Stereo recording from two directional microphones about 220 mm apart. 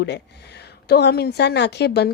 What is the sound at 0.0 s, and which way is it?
A woman's voice, 50° left (ahead or behind).